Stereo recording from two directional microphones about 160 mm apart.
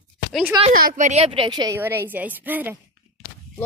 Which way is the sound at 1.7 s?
15° right (ahead or behind).